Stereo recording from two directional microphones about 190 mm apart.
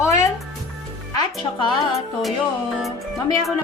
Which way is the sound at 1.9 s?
Centre (ahead or behind).